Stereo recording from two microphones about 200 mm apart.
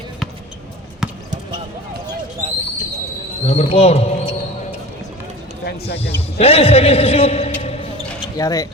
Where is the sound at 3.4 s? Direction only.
30° left (ahead or behind).